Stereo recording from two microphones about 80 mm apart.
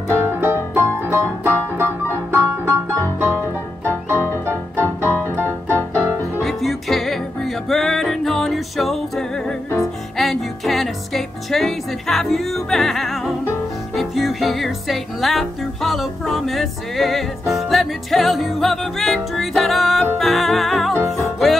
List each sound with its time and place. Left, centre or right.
0.1 s music: right
5.2 s piano: right
6.4 s music: centre